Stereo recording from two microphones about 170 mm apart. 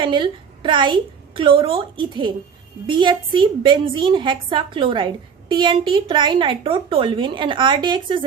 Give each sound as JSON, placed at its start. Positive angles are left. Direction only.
{"t": 0.0, "sound": "a woman's voice", "side_deg": -30}